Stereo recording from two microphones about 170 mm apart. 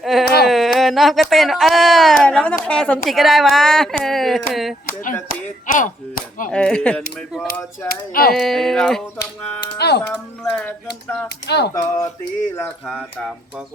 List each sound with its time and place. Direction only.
0.0 s a sound: centre (ahead or behind)
0.4 s a woman's voice: centre (ahead or behind)
4.9 s speech: 50° left (ahead or behind)
5.6 s chop: 55° left (ahead or behind)
6.5 s speech: 5° left (ahead or behind)
7.9 s speech: 60° left (ahead or behind)
8.3 s a woman's voice: centre (ahead or behind)
9.7 s speech: 75° left (ahead or behind)
10.1 s speech: 5° left (ahead or behind)
11.4 s speech: 75° left (ahead or behind)
11.7 s a sound: 20° left (ahead or behind)
12.5 s speech: 10° left (ahead or behind)